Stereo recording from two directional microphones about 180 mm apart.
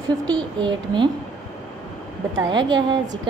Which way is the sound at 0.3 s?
25° right (ahead or behind).